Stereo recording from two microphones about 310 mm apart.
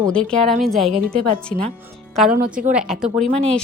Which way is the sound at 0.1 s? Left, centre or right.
Centre.